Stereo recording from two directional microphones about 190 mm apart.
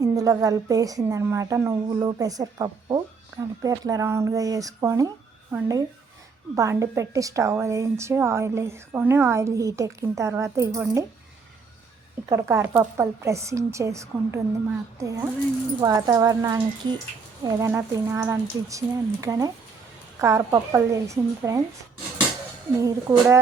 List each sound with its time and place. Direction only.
0.0 s a woman's voice: 20° right (ahead or behind)
12.3 s a woman's voice: 15° right (ahead or behind)
22.8 s a woman's voice: 15° right (ahead or behind)